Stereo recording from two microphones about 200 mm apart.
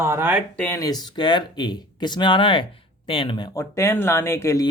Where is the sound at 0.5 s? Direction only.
10° left (ahead or behind).